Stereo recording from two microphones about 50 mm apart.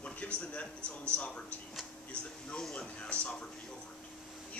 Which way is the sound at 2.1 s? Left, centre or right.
Centre.